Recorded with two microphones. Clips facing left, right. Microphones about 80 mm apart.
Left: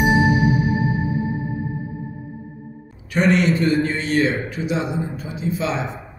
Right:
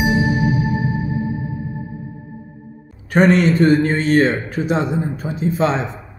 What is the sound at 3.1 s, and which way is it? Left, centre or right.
A man's voice, right.